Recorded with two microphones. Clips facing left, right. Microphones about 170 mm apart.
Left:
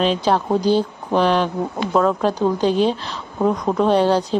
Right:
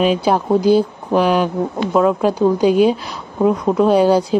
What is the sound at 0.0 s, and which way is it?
Speech, 10° right (ahead or behind).